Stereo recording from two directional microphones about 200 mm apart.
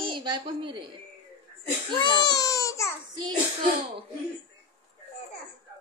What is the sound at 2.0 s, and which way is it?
Baby cry, 25° left (ahead or behind).